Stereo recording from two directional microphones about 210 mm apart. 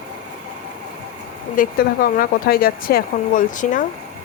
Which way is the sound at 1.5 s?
45° left (ahead or behind).